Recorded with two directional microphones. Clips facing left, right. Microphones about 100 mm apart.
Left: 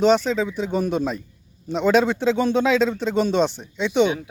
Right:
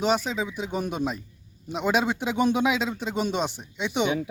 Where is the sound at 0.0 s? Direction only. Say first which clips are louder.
Left 7 dB; 10° right (ahead or behind).